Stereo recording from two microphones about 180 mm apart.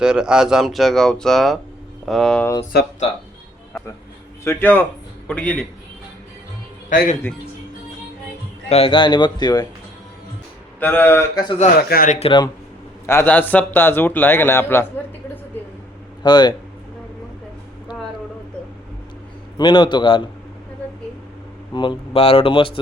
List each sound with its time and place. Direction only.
0.0 s speech: 5° right (ahead or behind)
4.4 s a man's voice: 10° left (ahead or behind)
6.9 s speech: 45° left (ahead or behind)
8.7 s speech: 30° left (ahead or behind)
10.8 s a man's voice: 10° left (ahead or behind)
11.6 s speech: 55° left (ahead or behind)
12.2 s speech: 25° left (ahead or behind)
13.1 s a man's voice: 10° left (ahead or behind)
16.2 s speech: 25° left (ahead or behind)
19.5 s speech: 25° left (ahead or behind)
21.8 s speech: 30° left (ahead or behind)